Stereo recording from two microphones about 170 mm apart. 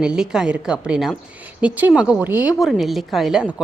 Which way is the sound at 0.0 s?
5° right (ahead or behind).